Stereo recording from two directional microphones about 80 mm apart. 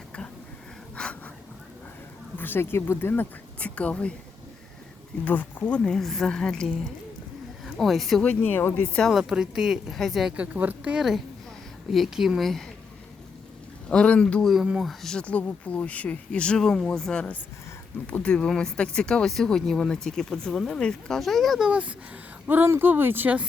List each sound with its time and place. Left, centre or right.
0.9 s wheeze: centre
2.4 s speech: left
5.2 s speech: left; by 8.2 s centre
8.2 s speech: centre
9.0 s speech: centre
10.3 s a woman's voice: centre
10.9 s speech: centre
13.9 s speech: centre
14.4 s speech: centre
15.0 s speech: centre
21.7 s a woman's voice: centre